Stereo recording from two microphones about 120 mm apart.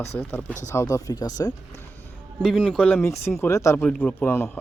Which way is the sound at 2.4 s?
5° left (ahead or behind).